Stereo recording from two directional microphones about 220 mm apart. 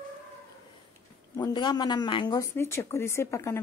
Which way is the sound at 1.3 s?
20° left (ahead or behind).